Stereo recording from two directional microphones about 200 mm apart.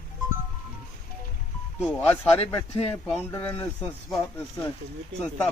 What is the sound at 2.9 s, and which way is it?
Speech, 10° left (ahead or behind).